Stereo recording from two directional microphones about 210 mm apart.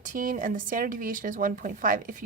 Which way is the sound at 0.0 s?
40° right (ahead or behind).